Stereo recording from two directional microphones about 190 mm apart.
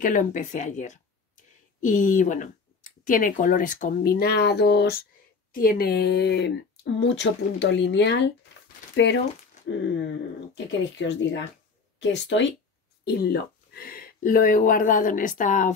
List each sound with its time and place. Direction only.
0.0 s speech: 45° left (ahead or behind); by 4.9 s 60° left (ahead or behind)
5.5 s speech: 50° left (ahead or behind); by 8.2 s 70° left (ahead or behind)
9.7 s speech: 70° left (ahead or behind)
13.0 s speech: 55° left (ahead or behind); by 15.7 s 40° left (ahead or behind)